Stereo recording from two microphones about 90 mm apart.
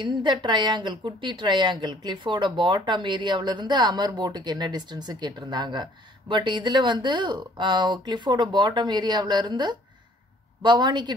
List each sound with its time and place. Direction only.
0.0 s a woman's voice: 60° right (ahead or behind)